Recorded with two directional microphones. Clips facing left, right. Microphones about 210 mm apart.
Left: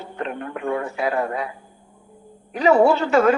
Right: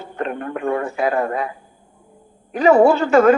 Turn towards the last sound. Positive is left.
turn(degrees=-50)  # may be behind; listen again after turning